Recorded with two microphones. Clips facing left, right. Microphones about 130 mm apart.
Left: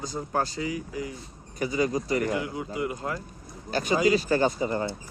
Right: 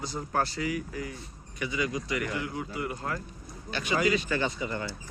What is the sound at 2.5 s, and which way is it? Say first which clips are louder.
Speech: left 3 dB; 20° left (ahead or behind).